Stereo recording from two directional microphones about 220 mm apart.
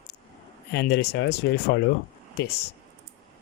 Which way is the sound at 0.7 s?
50° left (ahead or behind).